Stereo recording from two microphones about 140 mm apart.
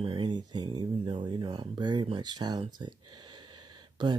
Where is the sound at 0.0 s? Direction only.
40° right (ahead or behind).